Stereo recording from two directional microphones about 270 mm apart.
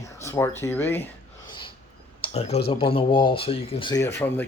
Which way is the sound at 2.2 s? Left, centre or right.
Left.